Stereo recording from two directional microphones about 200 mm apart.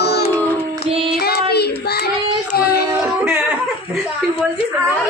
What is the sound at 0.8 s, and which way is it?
Female singing, 25° right (ahead or behind).